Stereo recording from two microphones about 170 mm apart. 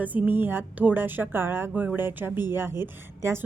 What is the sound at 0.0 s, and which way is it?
Speech, 10° right (ahead or behind).